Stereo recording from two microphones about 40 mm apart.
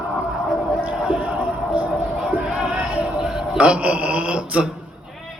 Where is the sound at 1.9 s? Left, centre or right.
Centre.